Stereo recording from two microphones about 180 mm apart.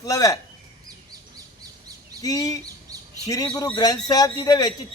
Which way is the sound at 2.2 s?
20° left (ahead or behind).